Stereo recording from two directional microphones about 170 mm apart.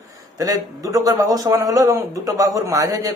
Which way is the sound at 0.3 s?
20° right (ahead or behind).